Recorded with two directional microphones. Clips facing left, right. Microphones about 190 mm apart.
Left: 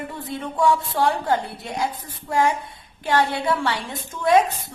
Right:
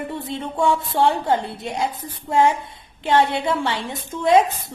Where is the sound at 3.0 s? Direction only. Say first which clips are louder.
Right 3 dB; 25° right (ahead or behind).